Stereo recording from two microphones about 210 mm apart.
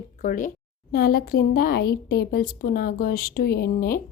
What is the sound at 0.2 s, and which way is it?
A woman's voice, 40° left (ahead or behind).